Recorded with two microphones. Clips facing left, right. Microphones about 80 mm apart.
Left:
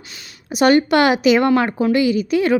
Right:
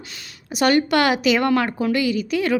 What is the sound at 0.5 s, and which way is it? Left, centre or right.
A woman's voice, left.